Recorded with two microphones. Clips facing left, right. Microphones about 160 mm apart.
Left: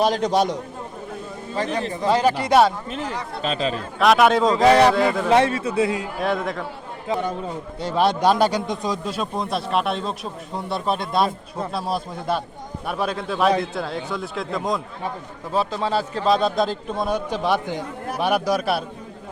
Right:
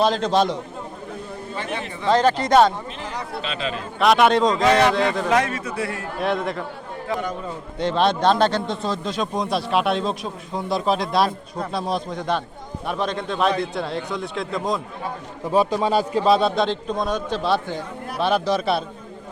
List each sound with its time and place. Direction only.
0.0 s a man's voice: 15° left (ahead or behind)
1.5 s speech: 35° left (ahead or behind)
2.0 s a man's voice: 10° left (ahead or behind)
3.4 s speech: 40° left (ahead or behind)
4.0 s a man's voice: centre (ahead or behind)
5.3 s speech: 30° left (ahead or behind)
6.1 s a man's voice: centre (ahead or behind)
7.8 s a man's voice: 10° left (ahead or behind)
15.5 s a man's voice: 15° right (ahead or behind); by 18.9 s 10° left (ahead or behind)